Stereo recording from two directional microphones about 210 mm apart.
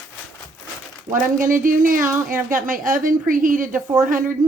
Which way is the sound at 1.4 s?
40° right (ahead or behind).